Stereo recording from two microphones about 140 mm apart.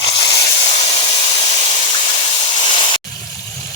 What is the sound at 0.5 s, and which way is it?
Steam, 45° left (ahead or behind).